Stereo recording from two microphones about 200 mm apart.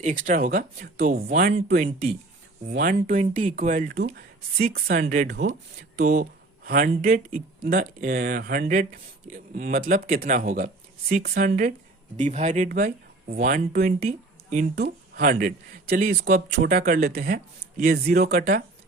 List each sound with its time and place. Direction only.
0.0 s speech: 40° right (ahead or behind)
5.3 s speech: 60° right (ahead or behind)
6.7 s speech: 45° right (ahead or behind)